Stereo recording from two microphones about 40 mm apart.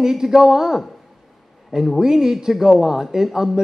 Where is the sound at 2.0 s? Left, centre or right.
Centre.